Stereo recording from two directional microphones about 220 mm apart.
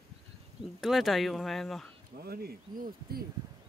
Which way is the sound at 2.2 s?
45° right (ahead or behind).